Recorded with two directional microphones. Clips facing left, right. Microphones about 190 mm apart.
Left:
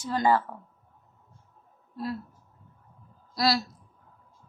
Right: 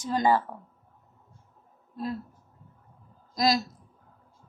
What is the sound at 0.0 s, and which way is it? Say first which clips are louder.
Speech: even; 15° right (ahead or behind).